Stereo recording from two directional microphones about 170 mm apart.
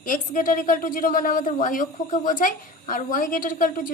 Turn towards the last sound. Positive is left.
turn(degrees=55)  # may be behind; listen again after turning